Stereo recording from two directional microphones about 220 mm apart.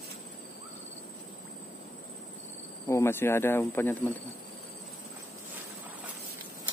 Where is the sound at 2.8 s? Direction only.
10° left (ahead or behind).